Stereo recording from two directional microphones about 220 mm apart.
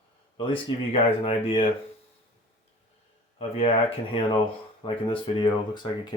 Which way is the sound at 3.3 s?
25° left (ahead or behind).